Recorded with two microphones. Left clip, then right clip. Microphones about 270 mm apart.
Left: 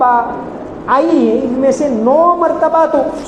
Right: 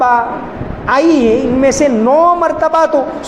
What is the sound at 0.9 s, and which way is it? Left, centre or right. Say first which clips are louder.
A man's voice: right 1 dB; right.